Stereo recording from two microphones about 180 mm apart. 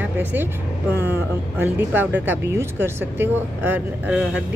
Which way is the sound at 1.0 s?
10° right (ahead or behind).